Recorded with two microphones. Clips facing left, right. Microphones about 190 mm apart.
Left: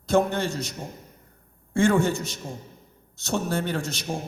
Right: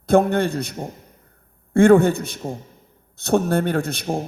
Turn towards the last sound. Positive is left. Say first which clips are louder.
# right 6 dB
turn(degrees=-55)  # may be behind; listen again after turning